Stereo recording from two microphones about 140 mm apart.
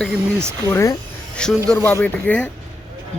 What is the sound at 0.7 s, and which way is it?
Speech, 20° left (ahead or behind).